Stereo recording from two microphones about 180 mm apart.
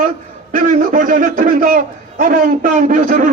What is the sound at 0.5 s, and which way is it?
A man's voice, 45° right (ahead or behind).